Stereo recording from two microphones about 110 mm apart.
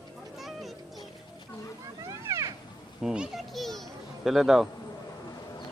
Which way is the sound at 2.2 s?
25° right (ahead or behind).